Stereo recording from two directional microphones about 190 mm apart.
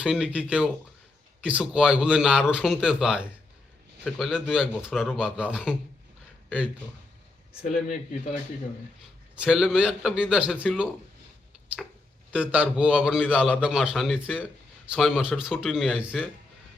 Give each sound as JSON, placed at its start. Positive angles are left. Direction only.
{"t": 0.0, "sound": "a man's voice", "side_deg": -5}
{"t": 7.6, "sound": "speech", "side_deg": 40}
{"t": 9.4, "sound": "a man's voice", "side_deg": 0}
{"t": 12.3, "sound": "a man's voice", "side_deg": -5}